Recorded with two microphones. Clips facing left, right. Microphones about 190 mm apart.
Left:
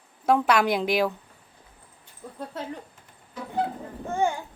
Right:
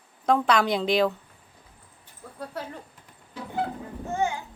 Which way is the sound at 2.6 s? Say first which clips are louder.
Even; 25° left (ahead or behind).